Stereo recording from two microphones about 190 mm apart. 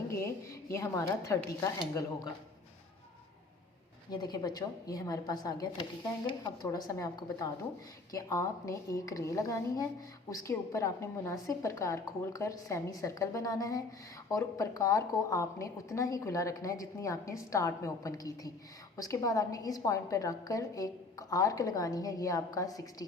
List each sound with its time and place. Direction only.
0.1 s a woman's voice: 15° left (ahead or behind)
4.1 s a woman's voice: 20° left (ahead or behind)